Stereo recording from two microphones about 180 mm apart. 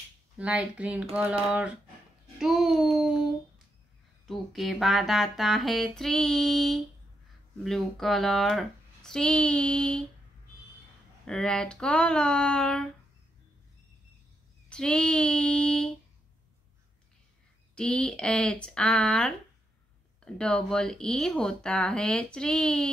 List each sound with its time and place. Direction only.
0.4 s speech: 5° right (ahead or behind)
2.4 s a child's voice: centre (ahead or behind)
4.3 s speech: centre (ahead or behind)
11.2 s speech: 5° left (ahead or behind)
14.7 s speech: 5° left (ahead or behind)
17.7 s speech: 5° left (ahead or behind)